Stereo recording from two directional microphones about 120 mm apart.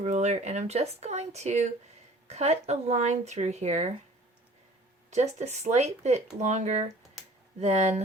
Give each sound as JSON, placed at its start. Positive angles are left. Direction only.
{"t": 0.0, "sound": "speech", "side_deg": -75}
{"t": 5.1, "sound": "speech", "side_deg": -70}
{"t": 6.4, "sound": "speech", "side_deg": -80}
{"t": 7.6, "sound": "speech", "side_deg": -65}